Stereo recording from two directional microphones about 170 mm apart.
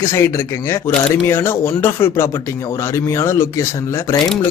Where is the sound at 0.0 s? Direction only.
15° left (ahead or behind).